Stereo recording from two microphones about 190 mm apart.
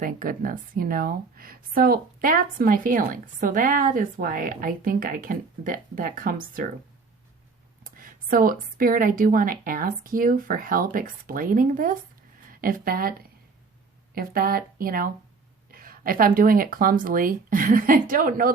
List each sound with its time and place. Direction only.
0.0 s speech: 45° right (ahead or behind)
7.9 s speech: 45° right (ahead or behind)